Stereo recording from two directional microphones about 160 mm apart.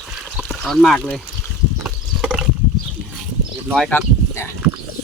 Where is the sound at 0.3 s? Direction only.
Centre (ahead or behind).